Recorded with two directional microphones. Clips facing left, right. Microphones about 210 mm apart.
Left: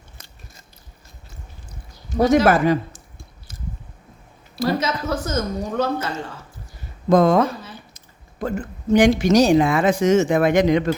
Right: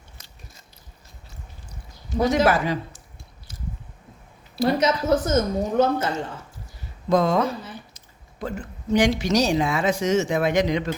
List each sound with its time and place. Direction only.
0.2 s biting: 50° left (ahead or behind)
2.3 s a sound: 50° left (ahead or behind)
4.8 s speech: 25° right (ahead or behind)
7.1 s speech: 50° left (ahead or behind)